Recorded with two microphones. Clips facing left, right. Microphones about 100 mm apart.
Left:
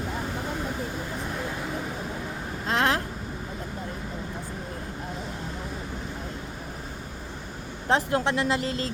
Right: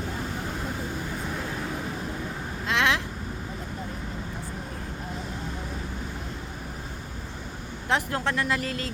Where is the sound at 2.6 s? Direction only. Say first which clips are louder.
Left 1 dB; 40° left (ahead or behind).